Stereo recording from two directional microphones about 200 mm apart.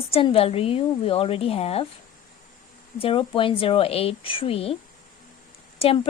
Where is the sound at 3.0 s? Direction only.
25° left (ahead or behind).